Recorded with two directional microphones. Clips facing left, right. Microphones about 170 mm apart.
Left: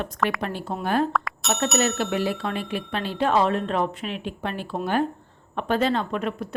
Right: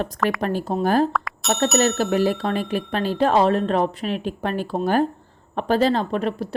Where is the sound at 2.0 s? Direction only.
40° right (ahead or behind).